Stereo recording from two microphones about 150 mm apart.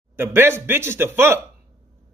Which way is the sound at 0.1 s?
15° right (ahead or behind).